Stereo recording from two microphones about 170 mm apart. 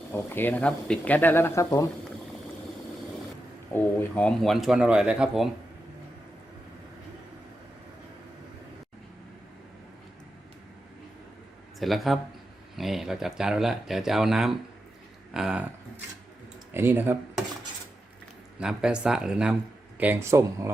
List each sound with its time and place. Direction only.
0.1 s speech: 10° left (ahead or behind)
3.8 s speech: 5° left (ahead or behind)
11.8 s speech: centre (ahead or behind)
18.6 s speech: 5° right (ahead or behind)